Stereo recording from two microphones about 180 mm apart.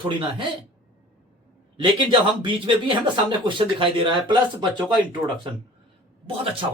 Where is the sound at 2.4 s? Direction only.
25° right (ahead or behind).